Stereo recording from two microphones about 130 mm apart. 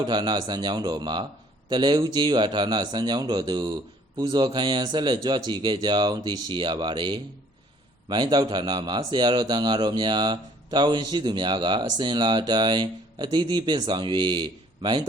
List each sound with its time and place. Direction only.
0.0 s speech: 35° right (ahead or behind)